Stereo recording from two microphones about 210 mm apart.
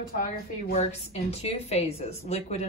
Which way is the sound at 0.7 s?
30° left (ahead or behind).